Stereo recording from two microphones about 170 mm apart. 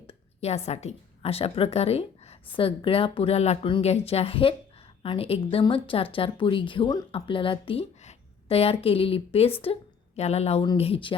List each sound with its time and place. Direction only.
0.1 s a woman's voice: 40° left (ahead or behind)